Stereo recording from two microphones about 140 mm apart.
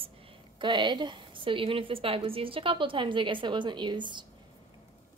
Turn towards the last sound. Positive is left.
turn(degrees=-35)  # may be behind; listen again after turning